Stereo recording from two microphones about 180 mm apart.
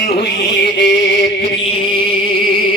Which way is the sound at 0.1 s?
60° left (ahead or behind).